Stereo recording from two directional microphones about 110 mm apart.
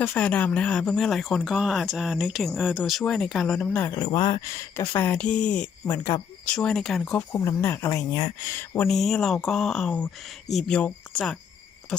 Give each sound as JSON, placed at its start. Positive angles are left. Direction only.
{"t": 0.0, "sound": "speech", "side_deg": 15}
{"t": 3.9, "sound": "speech", "side_deg": 40}
{"t": 4.4, "sound": "speech", "side_deg": 25}
{"t": 4.9, "sound": "speech", "side_deg": 15}
{"t": 6.0, "sound": "speech", "side_deg": 30}
{"t": 6.4, "sound": "speech", "side_deg": 5}
{"t": 7.2, "sound": "speech", "side_deg": 20}
{"t": 8.9, "sound": "speech", "side_deg": 5}